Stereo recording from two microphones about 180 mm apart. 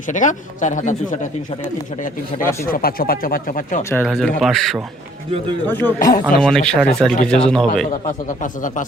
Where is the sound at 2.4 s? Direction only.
10° left (ahead or behind).